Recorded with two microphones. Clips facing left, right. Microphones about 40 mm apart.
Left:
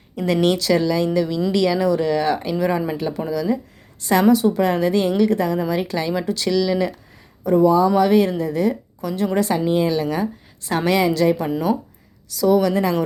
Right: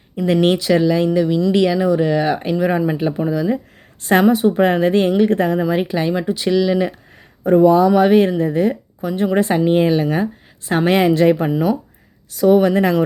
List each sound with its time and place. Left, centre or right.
0.4 s speech: right
7.4 s speech: right
7.9 s speech: right